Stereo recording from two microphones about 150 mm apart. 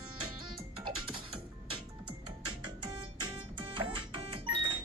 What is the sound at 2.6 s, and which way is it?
Music, 30° right (ahead or behind).